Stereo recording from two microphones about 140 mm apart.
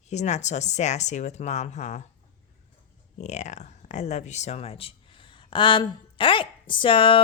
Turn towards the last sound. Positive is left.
turn(degrees=40)  # may be behind; listen again after turning